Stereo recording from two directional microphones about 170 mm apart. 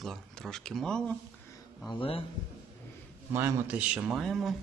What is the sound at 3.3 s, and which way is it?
Speech, 15° right (ahead or behind).